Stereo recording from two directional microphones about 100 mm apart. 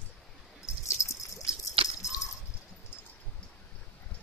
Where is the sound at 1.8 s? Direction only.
75° right (ahead or behind).